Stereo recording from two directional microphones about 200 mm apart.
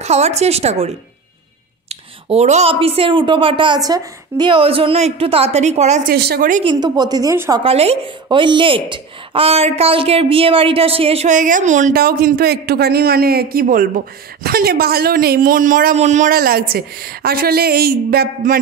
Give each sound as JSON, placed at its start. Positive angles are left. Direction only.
{"t": 0.0, "sound": "speech", "side_deg": -35}
{"t": 6.1, "sound": "a woman's voice", "side_deg": -50}
{"t": 6.6, "sound": "speech", "side_deg": -20}
{"t": 7.6, "sound": "a woman's voice", "side_deg": -30}